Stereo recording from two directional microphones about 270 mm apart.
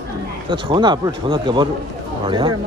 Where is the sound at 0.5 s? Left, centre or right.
Centre.